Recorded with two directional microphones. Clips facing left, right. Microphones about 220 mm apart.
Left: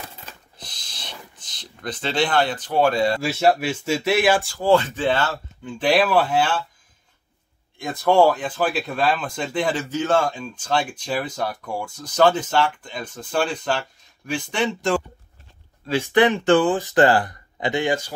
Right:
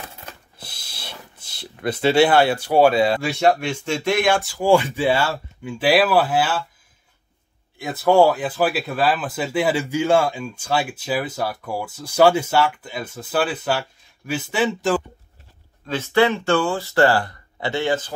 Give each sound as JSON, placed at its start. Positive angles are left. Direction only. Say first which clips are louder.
{"t": 0.6, "sound": "speech", "louder": "right 1 dB", "side_deg": -10}
{"t": 4.6, "sound": "speech", "louder": "right 1 dB", "side_deg": -10}
{"t": 7.8, "sound": "speech", "louder": "right 1 dB", "side_deg": -5}
{"t": 15.9, "sound": "speech", "louder": "left 1 dB", "side_deg": 15}